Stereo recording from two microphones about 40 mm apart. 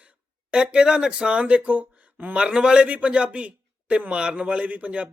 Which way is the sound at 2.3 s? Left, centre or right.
Right.